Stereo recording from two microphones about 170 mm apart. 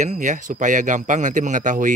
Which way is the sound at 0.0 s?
45° right (ahead or behind).